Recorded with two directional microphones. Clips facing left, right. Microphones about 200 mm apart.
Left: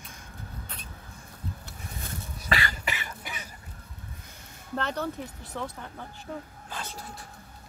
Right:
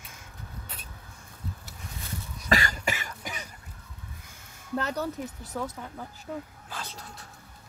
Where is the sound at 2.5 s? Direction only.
45° right (ahead or behind).